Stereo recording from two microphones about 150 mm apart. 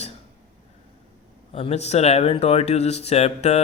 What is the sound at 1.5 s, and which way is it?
Speech, 45° left (ahead or behind).